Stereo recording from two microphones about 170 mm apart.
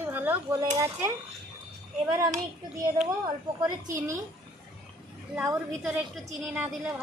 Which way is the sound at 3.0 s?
20° right (ahead or behind).